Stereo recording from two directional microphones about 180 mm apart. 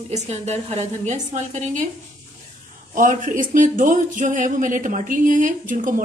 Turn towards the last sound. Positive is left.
turn(degrees=-45)  # may be behind; listen again after turning